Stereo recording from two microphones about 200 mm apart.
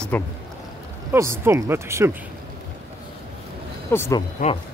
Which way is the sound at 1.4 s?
15° right (ahead or behind).